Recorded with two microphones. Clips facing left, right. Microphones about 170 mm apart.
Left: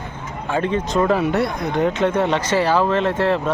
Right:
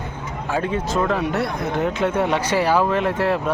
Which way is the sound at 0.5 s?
5° right (ahead or behind).